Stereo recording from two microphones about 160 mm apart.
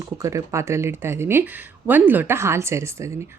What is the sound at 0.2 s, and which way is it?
Speech, 20° right (ahead or behind).